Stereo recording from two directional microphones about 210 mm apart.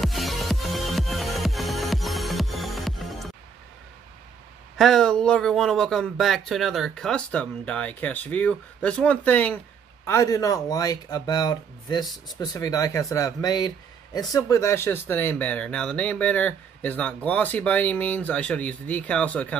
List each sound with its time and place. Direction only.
0.0 s music: centre (ahead or behind)
4.7 s speech: centre (ahead or behind)